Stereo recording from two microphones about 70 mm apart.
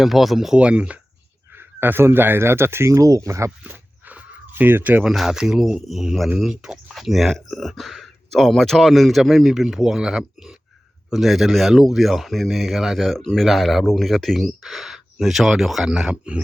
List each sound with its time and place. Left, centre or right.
0.0 s speech: centre
1.5 s speech: right
3.6 s a sound: right
5.0 s speech: centre